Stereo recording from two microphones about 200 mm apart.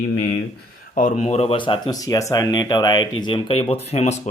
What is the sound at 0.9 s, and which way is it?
Speech, 40° left (ahead or behind).